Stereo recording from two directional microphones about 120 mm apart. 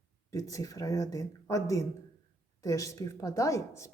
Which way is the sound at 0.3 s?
30° left (ahead or behind).